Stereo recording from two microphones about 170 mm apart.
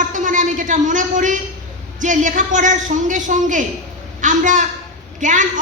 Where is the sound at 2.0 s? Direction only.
45° right (ahead or behind).